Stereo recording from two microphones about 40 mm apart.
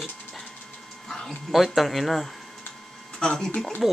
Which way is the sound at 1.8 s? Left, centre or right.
Centre.